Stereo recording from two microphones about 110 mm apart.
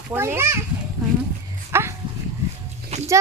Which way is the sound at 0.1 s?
20° right (ahead or behind).